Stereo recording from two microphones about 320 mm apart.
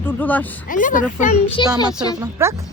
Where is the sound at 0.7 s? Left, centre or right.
Left.